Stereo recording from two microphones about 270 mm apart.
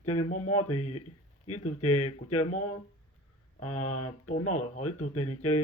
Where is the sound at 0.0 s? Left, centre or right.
Left.